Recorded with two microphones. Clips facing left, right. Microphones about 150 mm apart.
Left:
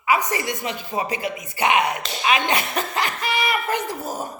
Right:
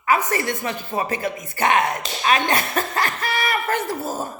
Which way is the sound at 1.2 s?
45° right (ahead or behind).